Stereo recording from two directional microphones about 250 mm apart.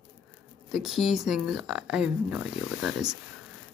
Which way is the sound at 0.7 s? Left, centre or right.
Centre.